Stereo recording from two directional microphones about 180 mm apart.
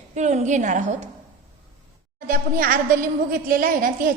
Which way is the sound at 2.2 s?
50° right (ahead or behind).